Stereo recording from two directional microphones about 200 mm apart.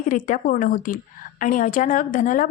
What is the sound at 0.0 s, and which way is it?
A woman's voice, 40° left (ahead or behind).